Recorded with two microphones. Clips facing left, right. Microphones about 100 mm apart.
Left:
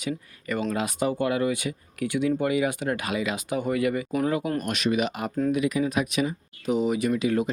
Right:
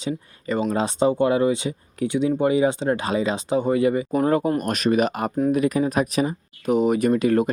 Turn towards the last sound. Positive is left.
turn(degrees=-50)  # may be behind; listen again after turning